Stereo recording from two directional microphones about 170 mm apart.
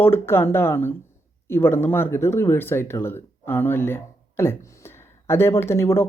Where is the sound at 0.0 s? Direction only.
15° left (ahead or behind).